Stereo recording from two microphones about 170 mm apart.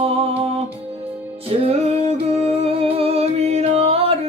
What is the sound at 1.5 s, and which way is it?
Music, 35° right (ahead or behind).